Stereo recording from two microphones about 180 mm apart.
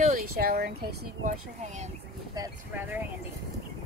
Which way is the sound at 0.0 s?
50° right (ahead or behind).